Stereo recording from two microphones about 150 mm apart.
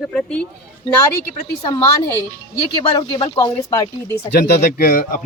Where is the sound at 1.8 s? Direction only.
15° left (ahead or behind).